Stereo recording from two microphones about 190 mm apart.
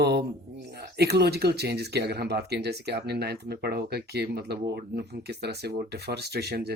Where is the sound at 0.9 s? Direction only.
60° right (ahead or behind).